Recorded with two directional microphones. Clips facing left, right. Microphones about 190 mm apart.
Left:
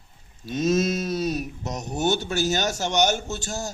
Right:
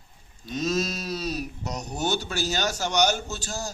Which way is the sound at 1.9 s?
25° left (ahead or behind).